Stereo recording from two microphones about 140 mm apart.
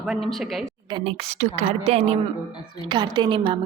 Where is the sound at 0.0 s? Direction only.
Centre (ahead or behind).